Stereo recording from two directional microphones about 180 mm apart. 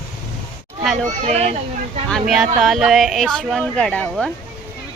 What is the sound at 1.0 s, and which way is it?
Speech, 40° right (ahead or behind).